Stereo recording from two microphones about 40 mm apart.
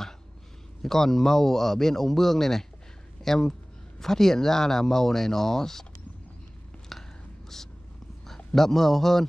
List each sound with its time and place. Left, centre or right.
0.8 s speech: centre
6.9 s whispering: centre
8.5 s speech: centre